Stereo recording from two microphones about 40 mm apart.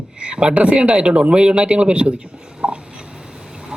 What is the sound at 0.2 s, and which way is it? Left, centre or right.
Speech, right.